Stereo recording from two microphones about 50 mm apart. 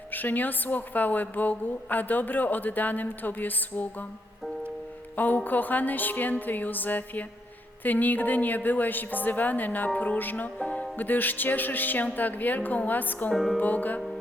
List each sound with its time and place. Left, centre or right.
0.1 s a woman's voice: left
5.1 s a woman's voice: left
10.9 s a woman's voice: left
13.3 s music: centre
13.6 s a woman's voice: left